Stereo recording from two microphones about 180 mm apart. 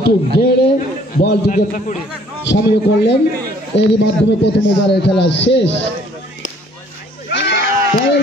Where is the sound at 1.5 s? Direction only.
45° left (ahead or behind).